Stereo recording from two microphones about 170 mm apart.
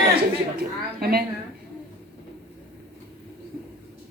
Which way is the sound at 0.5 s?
65° right (ahead or behind).